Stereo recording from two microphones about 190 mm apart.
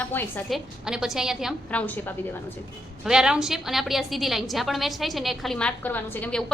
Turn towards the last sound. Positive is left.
turn(degrees=5)  # may be behind; listen again after turning